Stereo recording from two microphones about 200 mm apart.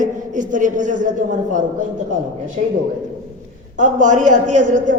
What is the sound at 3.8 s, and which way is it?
A man's voice, 40° right (ahead or behind).